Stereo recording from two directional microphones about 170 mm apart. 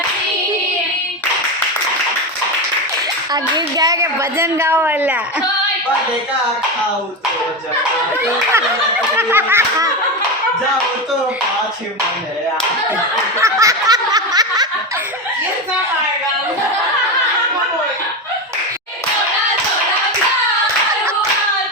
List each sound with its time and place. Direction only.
3.3 s a woman's voice: 20° right (ahead or behind)
9.1 s a woman's voice: 15° right (ahead or behind)
13.4 s snicker: 20° right (ahead or behind)